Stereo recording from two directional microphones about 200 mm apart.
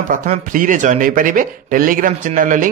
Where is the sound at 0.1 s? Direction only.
40° right (ahead or behind).